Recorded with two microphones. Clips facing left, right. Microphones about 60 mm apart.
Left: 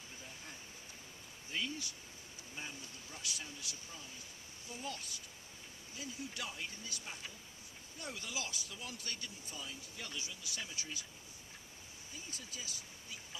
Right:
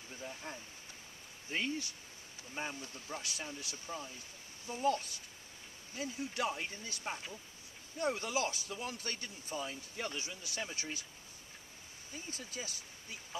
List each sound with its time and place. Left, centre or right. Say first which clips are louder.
1.5 s speech: right 4 dB; right
12.1 s speech: right 5 dB; right